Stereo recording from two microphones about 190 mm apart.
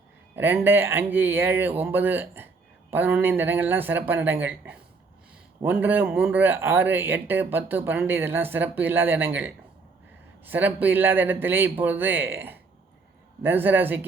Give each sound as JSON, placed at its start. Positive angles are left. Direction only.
{"t": 0.3, "sound": "speech", "side_deg": -10}